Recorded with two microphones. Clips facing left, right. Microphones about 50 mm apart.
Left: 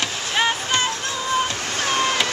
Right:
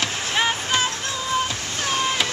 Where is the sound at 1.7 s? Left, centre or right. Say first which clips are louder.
Left 3 dB; left.